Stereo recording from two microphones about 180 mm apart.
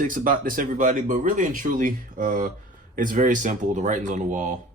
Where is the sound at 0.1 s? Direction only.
50° right (ahead or behind).